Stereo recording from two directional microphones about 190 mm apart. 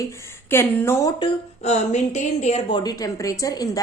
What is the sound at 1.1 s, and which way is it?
Speech, 25° left (ahead or behind).